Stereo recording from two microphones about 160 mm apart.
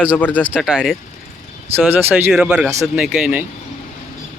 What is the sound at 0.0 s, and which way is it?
Speech, 10° left (ahead or behind).